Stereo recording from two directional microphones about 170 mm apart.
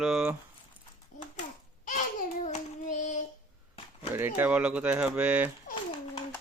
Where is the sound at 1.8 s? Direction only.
50° left (ahead or behind).